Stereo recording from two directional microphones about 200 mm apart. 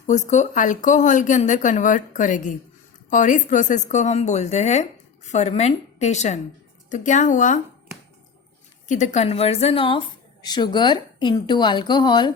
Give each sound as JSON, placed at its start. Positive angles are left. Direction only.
{"t": 0.1, "sound": "speech", "side_deg": 35}
{"t": 8.9, "sound": "speech", "side_deg": 35}